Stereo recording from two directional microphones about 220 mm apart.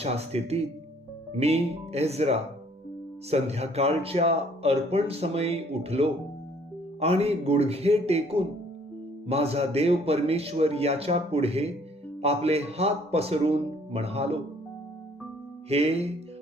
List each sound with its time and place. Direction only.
0.0 s speech: 30° right (ahead or behind)
15.7 s speech: 30° right (ahead or behind)